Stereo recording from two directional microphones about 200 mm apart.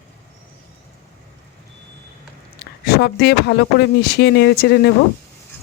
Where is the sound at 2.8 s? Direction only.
50° left (ahead or behind).